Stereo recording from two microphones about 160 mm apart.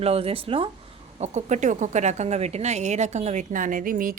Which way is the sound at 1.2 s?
45° right (ahead or behind).